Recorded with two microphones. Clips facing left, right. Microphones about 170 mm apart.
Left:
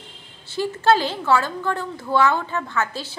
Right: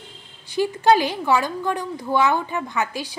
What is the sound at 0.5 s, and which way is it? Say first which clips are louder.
Speech: right 1 dB; 15° right (ahead or behind).